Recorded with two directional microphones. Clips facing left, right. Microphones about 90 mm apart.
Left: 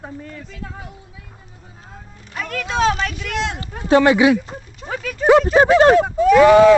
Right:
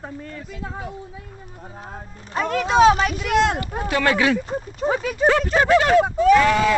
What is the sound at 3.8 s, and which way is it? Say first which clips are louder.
Speech: left 7 dB; 20° left (ahead or behind).